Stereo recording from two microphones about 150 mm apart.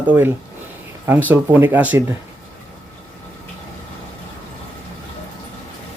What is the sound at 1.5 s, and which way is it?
Speech, 10° right (ahead or behind).